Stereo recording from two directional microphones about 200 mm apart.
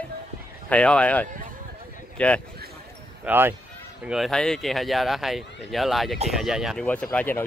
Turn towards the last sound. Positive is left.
turn(degrees=10)  # may be behind; listen again after turning